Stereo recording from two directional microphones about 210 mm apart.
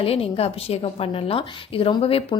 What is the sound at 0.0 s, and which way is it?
A woman's voice, 25° left (ahead or behind).